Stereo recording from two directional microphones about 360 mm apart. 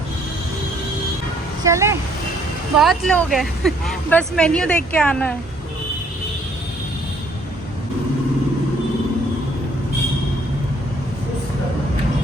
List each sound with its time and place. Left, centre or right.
1.6 s speech: centre